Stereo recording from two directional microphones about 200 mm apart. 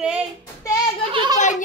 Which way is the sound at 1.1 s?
25° right (ahead or behind).